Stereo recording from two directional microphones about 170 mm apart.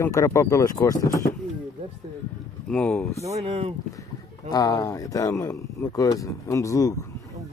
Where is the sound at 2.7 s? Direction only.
5° left (ahead or behind).